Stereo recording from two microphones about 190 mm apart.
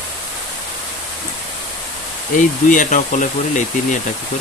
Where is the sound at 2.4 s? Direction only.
45° left (ahead or behind).